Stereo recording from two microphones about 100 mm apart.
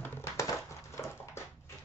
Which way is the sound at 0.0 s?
25° left (ahead or behind).